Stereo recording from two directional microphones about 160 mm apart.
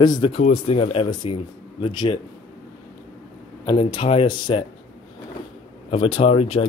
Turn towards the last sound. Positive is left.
turn(degrees=35)  # may be behind; listen again after turning